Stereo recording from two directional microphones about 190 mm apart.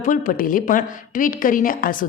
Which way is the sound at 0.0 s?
45° left (ahead or behind).